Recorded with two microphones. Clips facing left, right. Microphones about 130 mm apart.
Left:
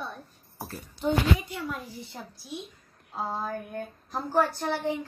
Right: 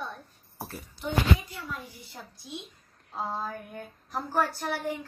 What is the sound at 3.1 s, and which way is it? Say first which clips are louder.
A woman's voice: left 2 dB; 10° left (ahead or behind).